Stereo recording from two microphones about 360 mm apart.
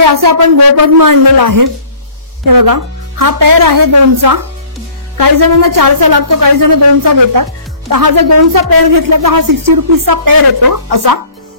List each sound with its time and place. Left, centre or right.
0.0 s a woman's voice: right